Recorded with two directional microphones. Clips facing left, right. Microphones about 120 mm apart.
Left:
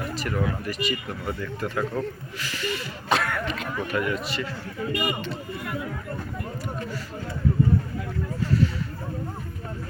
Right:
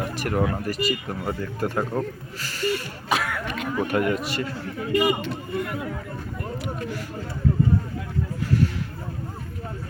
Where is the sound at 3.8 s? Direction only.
50° right (ahead or behind).